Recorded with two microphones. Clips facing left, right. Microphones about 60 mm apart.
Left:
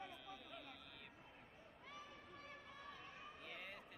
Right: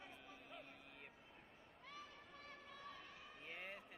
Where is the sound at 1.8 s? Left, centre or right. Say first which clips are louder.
Even; centre.